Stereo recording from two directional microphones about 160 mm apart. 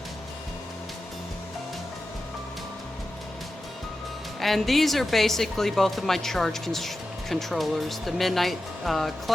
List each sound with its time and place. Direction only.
4.4 s speech: centre (ahead or behind)